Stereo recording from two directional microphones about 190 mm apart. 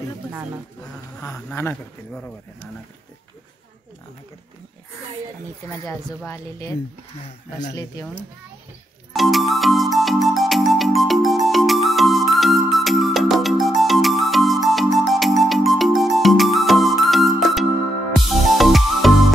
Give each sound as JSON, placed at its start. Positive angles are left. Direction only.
{"t": 1.2, "sound": "speech", "side_deg": 10}
{"t": 5.9, "sound": "speech", "side_deg": 15}
{"t": 9.1, "sound": "music", "side_deg": 0}